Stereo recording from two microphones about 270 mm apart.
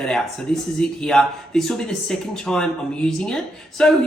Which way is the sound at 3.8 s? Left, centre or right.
Centre.